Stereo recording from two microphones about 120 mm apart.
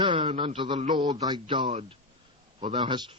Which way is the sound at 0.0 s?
45° right (ahead or behind).